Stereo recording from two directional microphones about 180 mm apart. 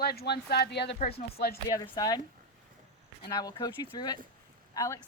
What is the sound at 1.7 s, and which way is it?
Speech, 20° left (ahead or behind).